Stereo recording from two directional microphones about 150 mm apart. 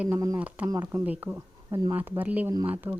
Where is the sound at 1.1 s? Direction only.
10° right (ahead or behind).